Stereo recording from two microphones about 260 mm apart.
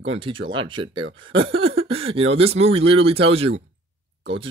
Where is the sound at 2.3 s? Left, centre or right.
Right.